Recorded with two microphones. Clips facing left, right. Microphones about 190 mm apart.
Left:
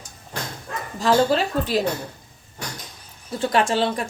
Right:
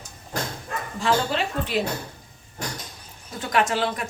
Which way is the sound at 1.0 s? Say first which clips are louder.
Left 5 dB; 35° left (ahead or behind).